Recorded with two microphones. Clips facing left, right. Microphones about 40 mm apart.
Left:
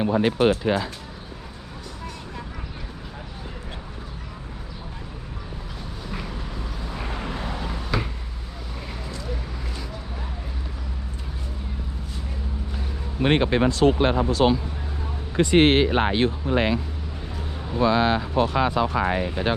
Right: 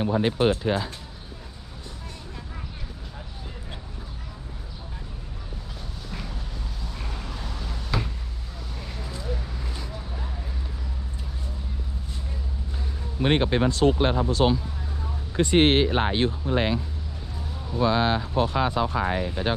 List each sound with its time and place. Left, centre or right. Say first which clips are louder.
0.0 s speech: left 3 dB; left
6.1 s vehicle: left 5 dB; left
7.9 s a sound: left 1 dB; centre
13.2 s speech: left 2 dB; left
13.7 s speech: left 2 dB; left
14.4 s speech: left 2 dB; left
15.4 s speech: left 2 dB; left